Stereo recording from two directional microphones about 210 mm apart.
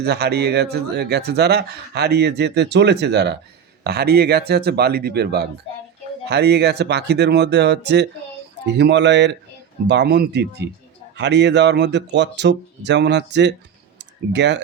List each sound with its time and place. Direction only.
0.0 s speech: 50° right (ahead or behind)